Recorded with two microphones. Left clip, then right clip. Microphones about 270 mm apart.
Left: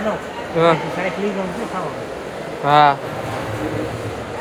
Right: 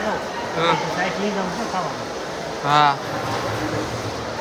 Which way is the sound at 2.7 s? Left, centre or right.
Centre.